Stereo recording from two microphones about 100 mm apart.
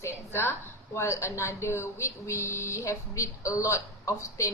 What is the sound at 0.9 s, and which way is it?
Speech, 30° left (ahead or behind).